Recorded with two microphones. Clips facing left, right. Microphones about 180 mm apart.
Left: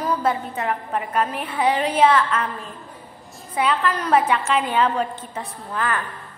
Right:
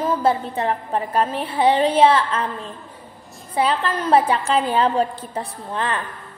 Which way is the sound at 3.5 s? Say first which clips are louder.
Right 1 dB; 30° right (ahead or behind).